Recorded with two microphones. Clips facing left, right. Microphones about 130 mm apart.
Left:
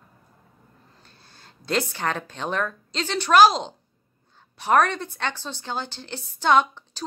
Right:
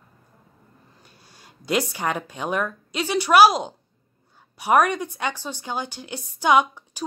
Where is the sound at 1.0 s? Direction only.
10° right (ahead or behind).